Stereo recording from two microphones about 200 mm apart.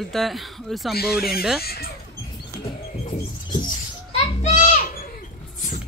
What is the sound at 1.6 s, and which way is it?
Speech, 50° left (ahead or behind).